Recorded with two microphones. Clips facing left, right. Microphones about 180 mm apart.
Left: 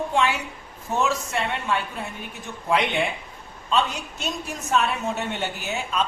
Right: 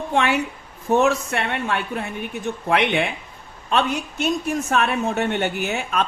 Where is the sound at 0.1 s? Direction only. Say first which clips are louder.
Right 3 dB; 60° right (ahead or behind).